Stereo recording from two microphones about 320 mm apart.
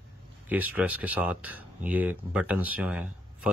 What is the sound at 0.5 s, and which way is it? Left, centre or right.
Speech, centre.